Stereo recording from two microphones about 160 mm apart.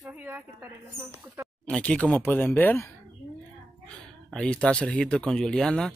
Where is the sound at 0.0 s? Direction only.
10° right (ahead or behind).